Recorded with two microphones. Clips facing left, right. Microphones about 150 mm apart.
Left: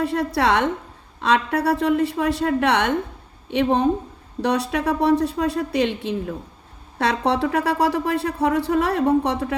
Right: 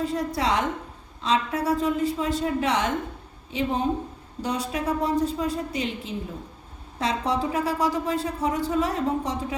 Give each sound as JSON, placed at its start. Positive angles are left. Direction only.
{"t": 0.0, "sound": "speech", "side_deg": 65}